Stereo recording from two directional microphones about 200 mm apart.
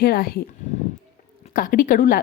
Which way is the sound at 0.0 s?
50° left (ahead or behind).